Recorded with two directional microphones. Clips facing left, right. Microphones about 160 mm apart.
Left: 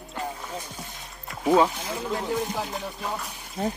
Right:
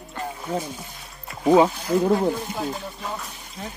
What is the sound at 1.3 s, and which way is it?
Music, centre (ahead or behind).